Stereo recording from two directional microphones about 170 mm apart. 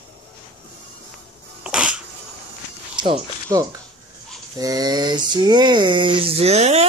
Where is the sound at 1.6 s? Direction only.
5° right (ahead or behind).